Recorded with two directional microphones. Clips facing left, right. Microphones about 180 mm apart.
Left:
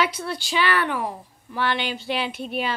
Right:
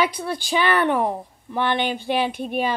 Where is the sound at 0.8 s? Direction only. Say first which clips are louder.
Right 6 dB; 55° right (ahead or behind).